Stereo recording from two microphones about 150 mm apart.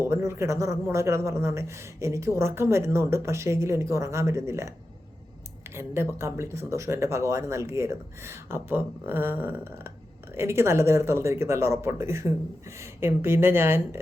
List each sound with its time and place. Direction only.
0.0 s a man's voice: 20° right (ahead or behind)
5.7 s speech: 15° right (ahead or behind)